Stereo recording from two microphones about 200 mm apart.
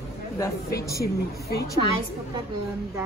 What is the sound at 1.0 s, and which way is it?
Speech, 50° left (ahead or behind).